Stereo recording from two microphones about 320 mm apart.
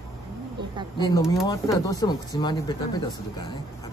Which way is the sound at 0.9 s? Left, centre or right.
Centre.